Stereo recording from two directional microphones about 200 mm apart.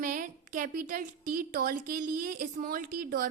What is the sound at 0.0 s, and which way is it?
A woman's voice, 40° right (ahead or behind).